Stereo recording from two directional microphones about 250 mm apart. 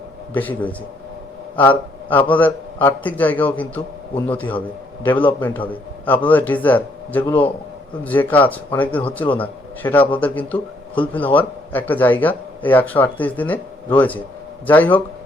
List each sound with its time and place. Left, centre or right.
0.3 s a man's voice: centre